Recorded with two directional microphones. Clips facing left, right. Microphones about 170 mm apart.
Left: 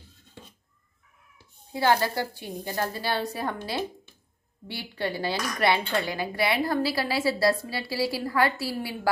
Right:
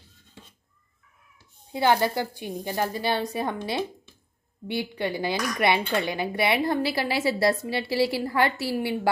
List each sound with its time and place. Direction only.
1.7 s a woman's voice: 20° right (ahead or behind)